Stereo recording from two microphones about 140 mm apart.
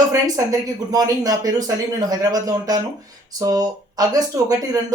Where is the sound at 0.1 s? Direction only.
25° right (ahead or behind).